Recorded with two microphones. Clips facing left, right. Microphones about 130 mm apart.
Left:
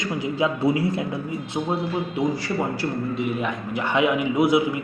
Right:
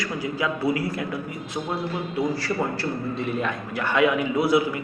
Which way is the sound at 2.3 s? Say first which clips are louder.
Left 1 dB; 15° left (ahead or behind).